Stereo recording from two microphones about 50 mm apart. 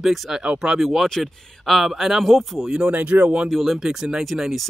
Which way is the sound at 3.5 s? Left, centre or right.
Centre.